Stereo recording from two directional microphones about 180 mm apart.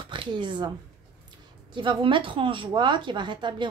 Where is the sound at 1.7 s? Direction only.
25° right (ahead or behind).